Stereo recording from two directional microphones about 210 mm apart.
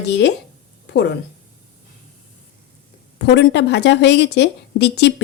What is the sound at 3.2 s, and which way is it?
Speech, 55° left (ahead or behind).